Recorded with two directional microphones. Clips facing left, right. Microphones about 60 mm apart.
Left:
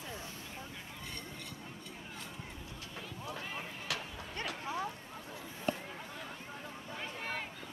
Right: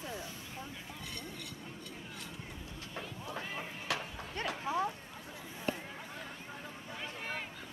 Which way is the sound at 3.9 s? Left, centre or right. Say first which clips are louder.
Right 4 dB; right.